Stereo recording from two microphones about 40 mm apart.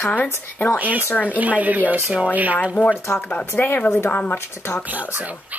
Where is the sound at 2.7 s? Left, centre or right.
Left.